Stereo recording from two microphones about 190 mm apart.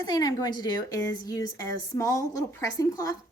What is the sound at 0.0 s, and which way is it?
A woman's voice, 20° left (ahead or behind).